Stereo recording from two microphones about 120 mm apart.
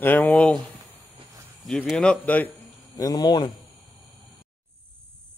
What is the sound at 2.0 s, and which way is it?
Speech, 10° left (ahead or behind).